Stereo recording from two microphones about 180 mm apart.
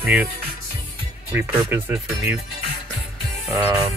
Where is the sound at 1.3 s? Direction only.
10° right (ahead or behind).